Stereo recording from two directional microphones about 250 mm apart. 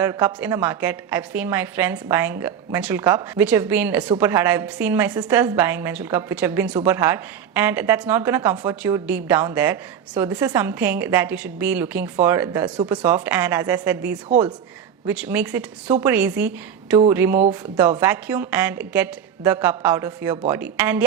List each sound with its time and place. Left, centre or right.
0.0 s a woman's voice: centre
15.0 s a woman's voice: centre